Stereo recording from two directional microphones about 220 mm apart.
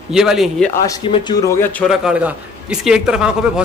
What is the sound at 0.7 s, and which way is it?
A man's voice, 15° left (ahead or behind).